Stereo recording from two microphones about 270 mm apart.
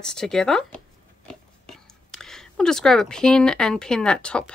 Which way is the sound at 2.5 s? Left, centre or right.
Centre.